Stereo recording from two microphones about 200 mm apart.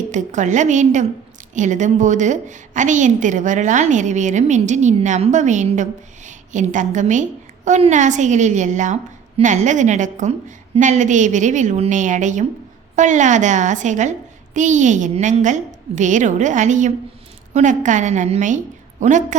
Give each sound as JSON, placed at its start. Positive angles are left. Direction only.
{"t": 0.1, "sound": "a woman's voice", "side_deg": -40}